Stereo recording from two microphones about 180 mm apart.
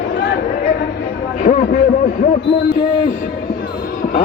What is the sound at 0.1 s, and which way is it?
Chatter, 80° left.